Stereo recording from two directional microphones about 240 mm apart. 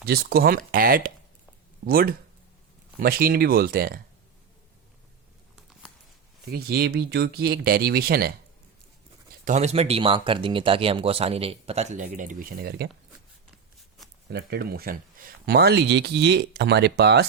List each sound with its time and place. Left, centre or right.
0.0 s speech: right
6.5 s speech: right
9.4 s speech: right
14.3 s speech: right